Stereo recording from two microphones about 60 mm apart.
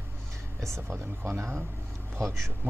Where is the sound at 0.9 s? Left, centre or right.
Right.